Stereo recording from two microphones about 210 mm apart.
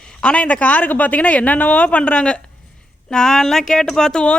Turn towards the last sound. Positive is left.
turn(degrees=5)  # may be behind; listen again after turning